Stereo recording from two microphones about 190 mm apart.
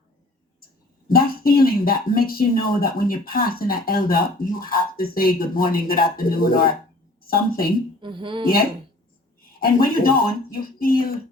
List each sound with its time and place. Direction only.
1.0 s speech: 50° left (ahead or behind)
8.0 s speech: 25° right (ahead or behind)
9.4 s speech: 50° left (ahead or behind)